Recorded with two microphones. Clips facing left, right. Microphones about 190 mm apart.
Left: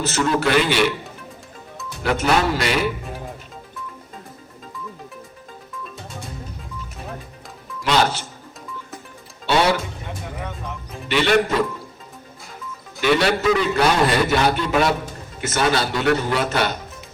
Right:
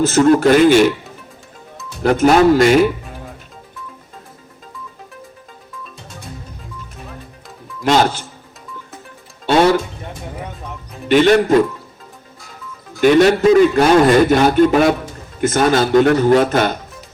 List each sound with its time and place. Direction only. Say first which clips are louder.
0.0 s a man's voice: right 9 dB; 45° right (ahead or behind)
2.0 s a man's voice: right 9 dB; 45° right (ahead or behind)
9.5 s music: right 6 dB; 50° right (ahead or behind)
11.1 s a man's voice: right 8 dB; 45° right (ahead or behind)
13.0 s a man's voice: right 8 dB; 45° right (ahead or behind)